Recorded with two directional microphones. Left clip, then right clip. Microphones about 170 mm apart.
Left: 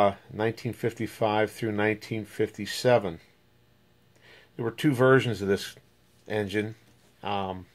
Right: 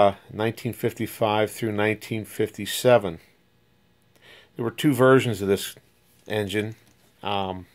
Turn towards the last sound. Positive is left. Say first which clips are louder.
# right 4 dB
turn(degrees=-35)  # may be behind; listen again after turning